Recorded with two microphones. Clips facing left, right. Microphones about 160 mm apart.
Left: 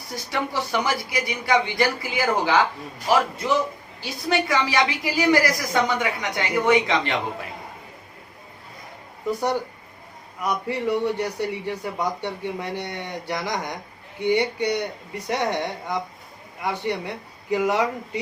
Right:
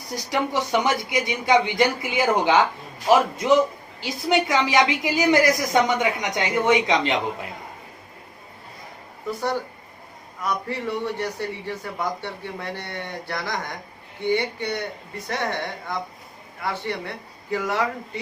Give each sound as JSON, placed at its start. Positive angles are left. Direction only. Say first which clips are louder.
{"t": 0.1, "sound": "a woman's voice", "louder": "right 3 dB", "side_deg": -20}
{"t": 10.4, "sound": "a man's voice", "louder": "left 2 dB", "side_deg": 15}